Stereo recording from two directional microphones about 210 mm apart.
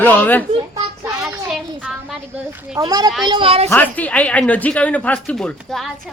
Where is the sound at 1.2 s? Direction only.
5° right (ahead or behind); by 3.7 s 25° right (ahead or behind).